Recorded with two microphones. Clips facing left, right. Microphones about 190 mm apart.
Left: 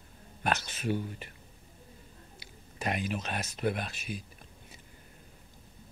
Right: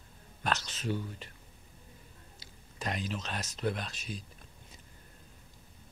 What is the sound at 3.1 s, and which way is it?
Speech, 55° left (ahead or behind).